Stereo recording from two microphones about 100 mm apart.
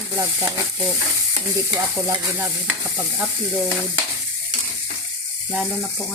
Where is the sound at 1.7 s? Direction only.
35° right (ahead or behind).